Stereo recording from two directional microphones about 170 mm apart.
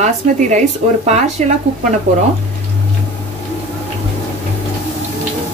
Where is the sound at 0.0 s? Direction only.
45° right (ahead or behind).